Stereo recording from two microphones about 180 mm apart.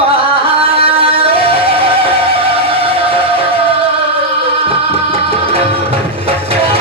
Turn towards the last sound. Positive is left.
turn(degrees=-30)  # may be behind; listen again after turning